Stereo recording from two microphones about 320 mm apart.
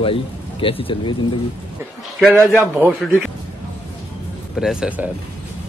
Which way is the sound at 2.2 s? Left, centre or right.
Centre.